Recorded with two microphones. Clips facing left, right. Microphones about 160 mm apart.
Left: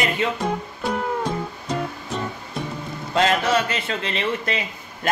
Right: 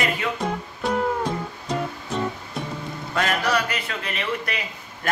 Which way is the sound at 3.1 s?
25° left (ahead or behind).